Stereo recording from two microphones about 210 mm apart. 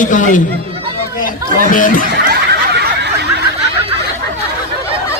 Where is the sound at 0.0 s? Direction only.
40° left (ahead or behind).